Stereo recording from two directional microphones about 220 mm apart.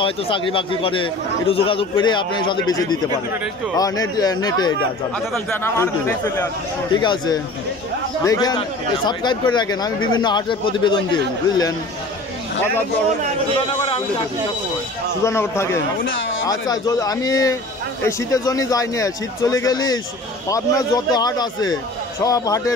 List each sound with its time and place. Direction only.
0.0 s a man's voice: 25° left (ahead or behind)
13.6 s a man's voice: 20° left (ahead or behind)
15.2 s a man's voice: 10° left (ahead or behind)